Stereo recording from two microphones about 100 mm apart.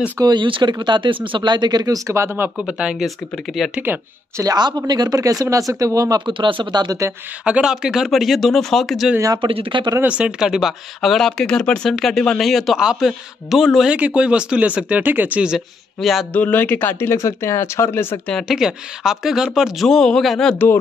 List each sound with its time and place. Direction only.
0.2 s speech: 50° right (ahead or behind); by 2.5 s 25° right (ahead or behind)
2.5 s speech: 10° right (ahead or behind)
4.4 s speech: 40° right (ahead or behind)
6.2 s speech: 55° right (ahead or behind)
7.4 s speech: 10° right (ahead or behind)
9.4 s speech: 60° right (ahead or behind)
10.0 s speech: 10° right (ahead or behind)
13.9 s speech: 15° right (ahead or behind)
16.3 s speech: 15° left (ahead or behind)
18.3 s speech: 5° right (ahead or behind)